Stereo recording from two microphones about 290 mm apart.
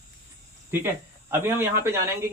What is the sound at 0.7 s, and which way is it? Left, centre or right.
Speech, centre.